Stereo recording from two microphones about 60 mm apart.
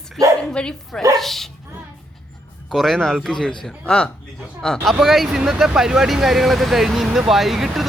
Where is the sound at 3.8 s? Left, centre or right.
Centre.